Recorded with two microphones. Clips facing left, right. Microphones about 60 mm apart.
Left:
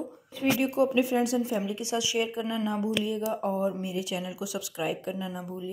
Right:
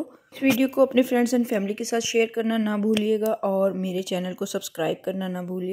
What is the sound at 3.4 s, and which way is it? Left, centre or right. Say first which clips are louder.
A woman's voice: right 6 dB; right.